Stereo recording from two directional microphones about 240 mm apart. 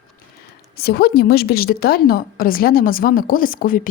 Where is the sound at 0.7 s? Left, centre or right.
Left.